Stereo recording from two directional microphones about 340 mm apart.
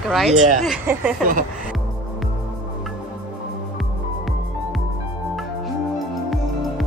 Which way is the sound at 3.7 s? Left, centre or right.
Centre.